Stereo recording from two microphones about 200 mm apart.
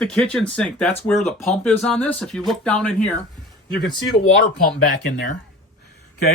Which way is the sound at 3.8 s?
55° left (ahead or behind).